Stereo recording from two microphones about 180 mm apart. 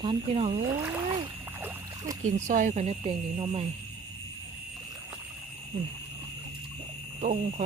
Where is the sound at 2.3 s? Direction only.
45° right (ahead or behind).